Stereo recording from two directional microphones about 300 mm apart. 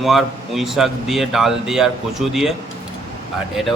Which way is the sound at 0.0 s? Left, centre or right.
Centre.